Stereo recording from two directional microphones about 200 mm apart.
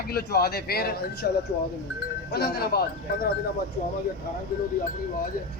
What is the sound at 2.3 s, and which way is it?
Speech, 55° left (ahead or behind).